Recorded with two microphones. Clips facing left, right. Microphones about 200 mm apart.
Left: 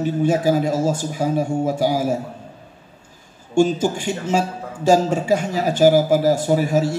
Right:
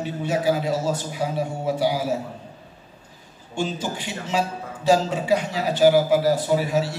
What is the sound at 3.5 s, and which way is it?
A man's voice, 45° left (ahead or behind).